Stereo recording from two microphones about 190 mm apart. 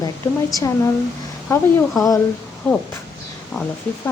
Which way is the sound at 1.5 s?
15° left (ahead or behind).